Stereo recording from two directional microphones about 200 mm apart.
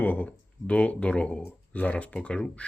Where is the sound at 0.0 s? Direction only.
5° left (ahead or behind).